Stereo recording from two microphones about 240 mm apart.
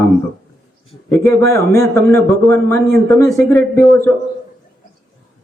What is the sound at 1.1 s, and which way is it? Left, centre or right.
A man's voice, centre.